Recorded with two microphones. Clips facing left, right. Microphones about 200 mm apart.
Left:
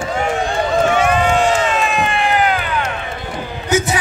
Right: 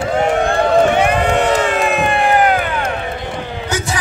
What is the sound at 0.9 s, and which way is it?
Crowd, 60° right (ahead or behind).